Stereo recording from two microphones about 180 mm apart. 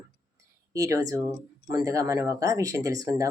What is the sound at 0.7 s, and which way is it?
Speech, 20° right (ahead or behind).